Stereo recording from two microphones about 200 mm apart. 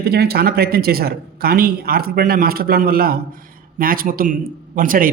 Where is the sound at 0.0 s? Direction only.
55° right (ahead or behind).